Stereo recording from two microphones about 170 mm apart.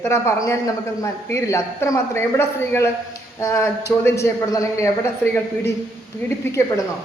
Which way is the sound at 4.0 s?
15° left (ahead or behind).